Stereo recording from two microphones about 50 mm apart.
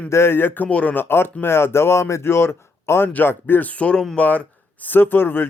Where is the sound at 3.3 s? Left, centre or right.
Left.